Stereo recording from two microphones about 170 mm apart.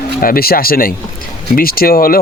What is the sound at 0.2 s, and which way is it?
Speech, 60° left (ahead or behind).